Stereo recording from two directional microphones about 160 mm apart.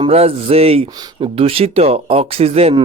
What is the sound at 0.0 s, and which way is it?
Speech, 40° right (ahead or behind).